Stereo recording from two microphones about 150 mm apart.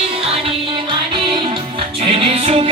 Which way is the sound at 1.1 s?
35° right (ahead or behind).